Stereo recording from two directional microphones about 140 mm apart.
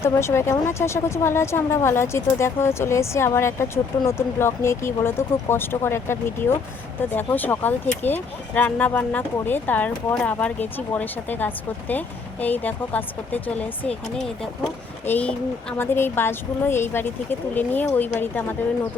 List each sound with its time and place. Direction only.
0.0 s speech: 20° left (ahead or behind)